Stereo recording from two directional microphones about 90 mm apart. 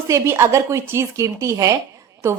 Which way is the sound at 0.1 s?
35° right (ahead or behind).